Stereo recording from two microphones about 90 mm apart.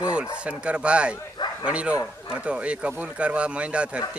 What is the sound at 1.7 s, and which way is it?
Speech, 15° right (ahead or behind).